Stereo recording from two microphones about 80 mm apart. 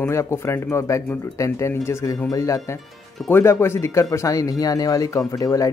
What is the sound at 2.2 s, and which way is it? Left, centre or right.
Speech, left.